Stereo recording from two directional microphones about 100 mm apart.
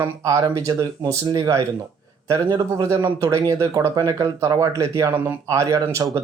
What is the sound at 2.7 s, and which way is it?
Speech, 30° right (ahead or behind).